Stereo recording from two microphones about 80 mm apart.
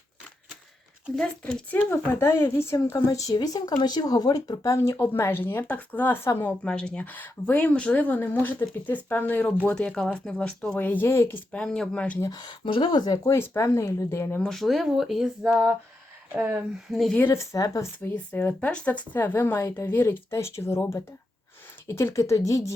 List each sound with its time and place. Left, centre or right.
1.1 s speech: centre
1.7 s speech: left
4.9 s speech: left
6.7 s speech: centre; by 11.4 s left
11.5 s speech: centre
12.3 s speech: left
13.3 s speech: left
14.4 s speech: centre
16.3 s speech: right
16.9 s speech: centre
17.3 s speech: left
18.0 s speech: left